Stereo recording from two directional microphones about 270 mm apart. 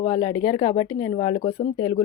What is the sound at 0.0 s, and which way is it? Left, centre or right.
Speech, centre.